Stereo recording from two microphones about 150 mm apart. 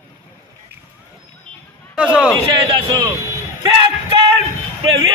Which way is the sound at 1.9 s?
5° right (ahead or behind).